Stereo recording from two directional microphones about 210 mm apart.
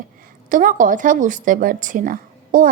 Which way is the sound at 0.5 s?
40° right (ahead or behind).